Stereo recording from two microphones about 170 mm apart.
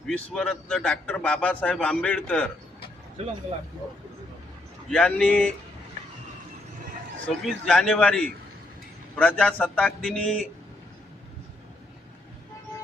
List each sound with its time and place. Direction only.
0.1 s a man's voice: 5° left (ahead or behind)
3.2 s speech: 40° right (ahead or behind)
4.9 s a man's voice: 5° left (ahead or behind)
7.4 s a man's voice: centre (ahead or behind)